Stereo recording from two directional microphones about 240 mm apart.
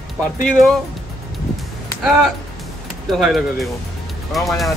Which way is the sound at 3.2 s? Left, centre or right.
Centre.